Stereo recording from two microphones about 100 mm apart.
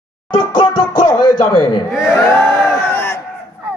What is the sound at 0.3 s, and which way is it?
Music, 55° left (ahead or behind).